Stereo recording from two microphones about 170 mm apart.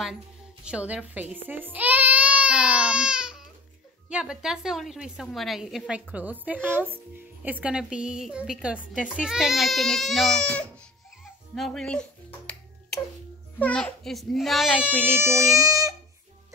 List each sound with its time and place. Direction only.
0.7 s a woman's voice: 5° right (ahead or behind)
1.3 s baby cry: 10° right (ahead or behind)
4.1 s a woman's voice: 5° right (ahead or behind)
11.5 s finger snapping: centre (ahead or behind)
13.6 s a woman's voice: 10° left (ahead or behind)
15.1 s speech: 15° right (ahead or behind)